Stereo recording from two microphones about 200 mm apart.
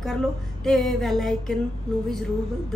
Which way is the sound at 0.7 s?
Centre (ahead or behind).